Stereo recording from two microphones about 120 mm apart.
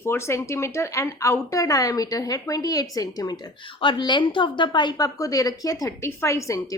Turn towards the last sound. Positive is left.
turn(degrees=25)  # may be behind; listen again after turning